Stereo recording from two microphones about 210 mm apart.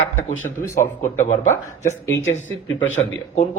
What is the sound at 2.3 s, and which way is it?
Speech, 70° left (ahead or behind).